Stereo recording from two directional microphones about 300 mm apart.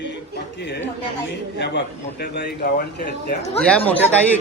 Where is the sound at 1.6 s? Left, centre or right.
Left.